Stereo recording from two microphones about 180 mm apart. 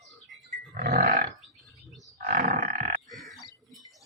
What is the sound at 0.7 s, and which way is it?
Livestock, 60° right (ahead or behind).